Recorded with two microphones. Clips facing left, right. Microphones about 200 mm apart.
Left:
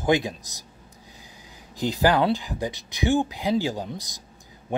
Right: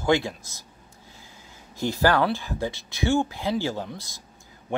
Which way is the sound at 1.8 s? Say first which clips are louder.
Left 1 dB; 15° left (ahead or behind).